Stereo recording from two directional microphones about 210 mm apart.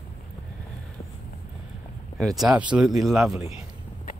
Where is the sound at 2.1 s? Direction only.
Centre (ahead or behind).